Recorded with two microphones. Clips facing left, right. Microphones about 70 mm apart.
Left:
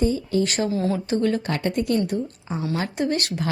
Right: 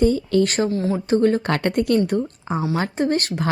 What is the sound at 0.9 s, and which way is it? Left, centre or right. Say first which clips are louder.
Speech: right 5 dB; right.